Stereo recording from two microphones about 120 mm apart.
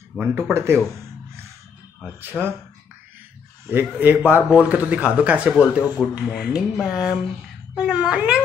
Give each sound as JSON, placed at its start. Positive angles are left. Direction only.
{"t": 0.2, "sound": "speech", "side_deg": -15}
{"t": 2.1, "sound": "speech", "side_deg": -15}
{"t": 3.6, "sound": "speech", "side_deg": -15}